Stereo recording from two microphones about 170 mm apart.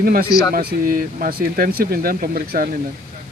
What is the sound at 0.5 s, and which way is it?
Speech, 60° right (ahead or behind).